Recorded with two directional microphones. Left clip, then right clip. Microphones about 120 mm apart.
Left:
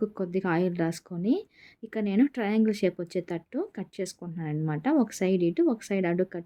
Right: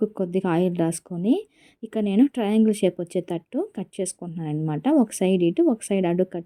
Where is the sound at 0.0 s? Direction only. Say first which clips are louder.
Right 5 dB; 30° right (ahead or behind).